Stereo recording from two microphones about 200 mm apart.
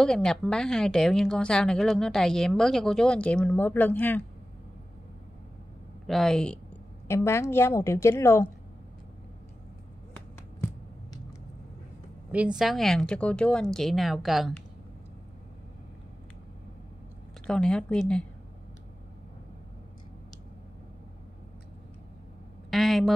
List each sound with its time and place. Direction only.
0.0 s a woman's voice: 5° left (ahead or behind)
6.0 s a woman's voice: centre (ahead or behind)
12.3 s a woman's voice: 5° right (ahead or behind)
17.5 s a woman's voice: 5° left (ahead or behind)
22.7 s a sound: centre (ahead or behind)